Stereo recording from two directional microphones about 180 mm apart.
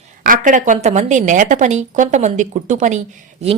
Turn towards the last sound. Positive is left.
turn(degrees=-40)  # may be behind; listen again after turning